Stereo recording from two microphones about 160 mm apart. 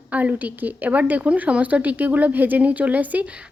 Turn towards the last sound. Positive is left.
turn(degrees=-10)  # may be behind; listen again after turning